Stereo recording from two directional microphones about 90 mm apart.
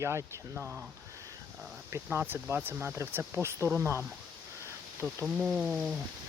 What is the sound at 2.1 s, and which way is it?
Speech, 25° right (ahead or behind).